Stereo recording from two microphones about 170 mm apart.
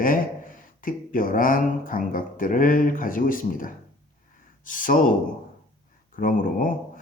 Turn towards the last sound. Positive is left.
turn(degrees=55)  # may be behind; listen again after turning